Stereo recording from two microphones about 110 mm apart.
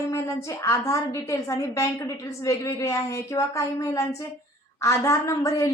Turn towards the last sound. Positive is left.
turn(degrees=30)  # may be behind; listen again after turning